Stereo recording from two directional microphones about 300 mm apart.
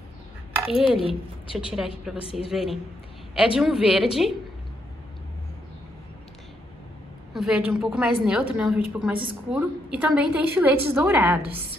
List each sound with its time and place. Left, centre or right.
0.6 s a woman's voice: centre
0.9 s a woman's voice: centre
1.7 s a woman's voice: centre
7.3 s a woman's voice: centre